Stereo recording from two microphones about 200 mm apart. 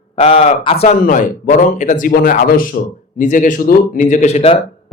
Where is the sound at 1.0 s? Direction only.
40° left (ahead or behind).